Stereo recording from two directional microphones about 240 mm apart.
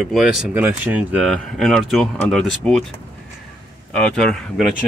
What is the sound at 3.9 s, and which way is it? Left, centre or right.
Speech, centre.